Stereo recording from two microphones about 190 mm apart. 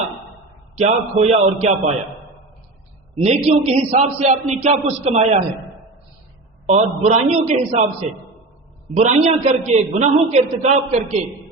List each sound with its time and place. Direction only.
0.8 s a man's voice: 35° right (ahead or behind)
3.2 s a man's voice: 35° right (ahead or behind)
6.7 s a man's voice: 40° right (ahead or behind)
9.0 s a man's voice: 35° right (ahead or behind)